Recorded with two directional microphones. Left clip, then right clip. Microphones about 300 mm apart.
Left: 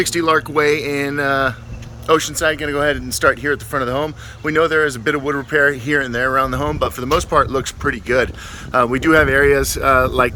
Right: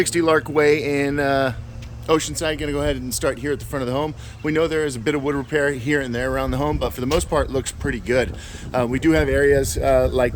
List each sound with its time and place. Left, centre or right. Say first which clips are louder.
0.0 s speech: left 2 dB; centre